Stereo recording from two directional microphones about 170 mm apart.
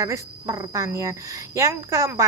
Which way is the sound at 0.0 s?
20° right (ahead or behind).